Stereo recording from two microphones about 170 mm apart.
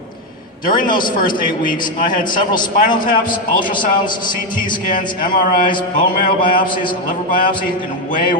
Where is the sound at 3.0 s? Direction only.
55° left (ahead or behind).